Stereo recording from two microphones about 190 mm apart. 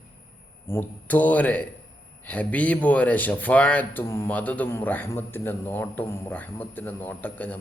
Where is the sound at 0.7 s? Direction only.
10° left (ahead or behind).